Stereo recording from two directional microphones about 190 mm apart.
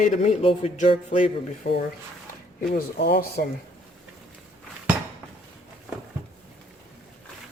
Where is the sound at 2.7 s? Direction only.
50° left (ahead or behind).